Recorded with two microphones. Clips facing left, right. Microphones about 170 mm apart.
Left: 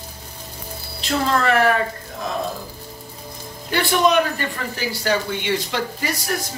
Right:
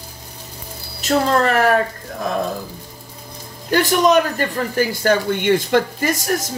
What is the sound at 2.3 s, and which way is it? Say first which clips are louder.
Music: right 4 dB; 55° right (ahead or behind).